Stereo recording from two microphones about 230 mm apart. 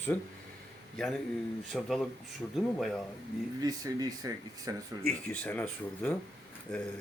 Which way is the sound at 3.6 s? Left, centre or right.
Centre.